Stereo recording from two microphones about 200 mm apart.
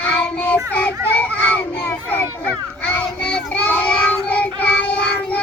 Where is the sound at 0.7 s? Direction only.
10° left (ahead or behind).